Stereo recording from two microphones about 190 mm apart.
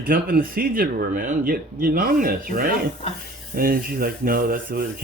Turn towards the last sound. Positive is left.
turn(degrees=-50)  # may be behind; listen again after turning